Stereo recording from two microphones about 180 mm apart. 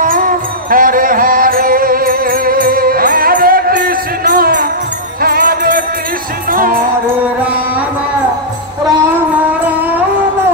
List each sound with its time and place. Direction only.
0.0 s music: 50° right (ahead or behind)
9.7 s music: 10° right (ahead or behind)